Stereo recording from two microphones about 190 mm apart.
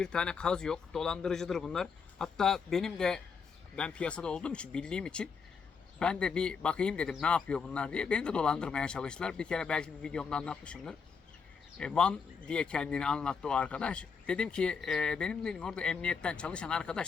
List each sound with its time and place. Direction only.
0.0 s speech: 5° left (ahead or behind)